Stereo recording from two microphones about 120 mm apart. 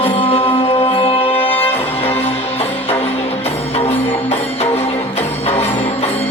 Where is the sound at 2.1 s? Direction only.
60° left (ahead or behind).